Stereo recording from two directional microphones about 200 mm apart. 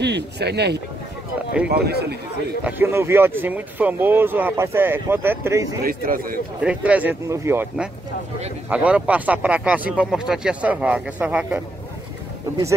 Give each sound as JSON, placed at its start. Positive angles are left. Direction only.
{"t": 0.0, "sound": "speech", "side_deg": -55}
{"t": 2.6, "sound": "speech", "side_deg": -10}
{"t": 5.9, "sound": "speech", "side_deg": -45}
{"t": 6.6, "sound": "speech", "side_deg": -5}
{"t": 8.6, "sound": "speech", "side_deg": -5}